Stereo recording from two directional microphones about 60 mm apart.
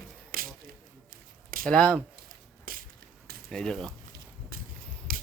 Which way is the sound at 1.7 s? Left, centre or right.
Centre.